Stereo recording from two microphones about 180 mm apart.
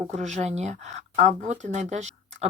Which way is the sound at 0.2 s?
40° right (ahead or behind).